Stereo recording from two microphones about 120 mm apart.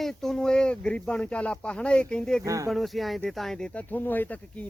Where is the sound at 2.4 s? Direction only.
25° right (ahead or behind).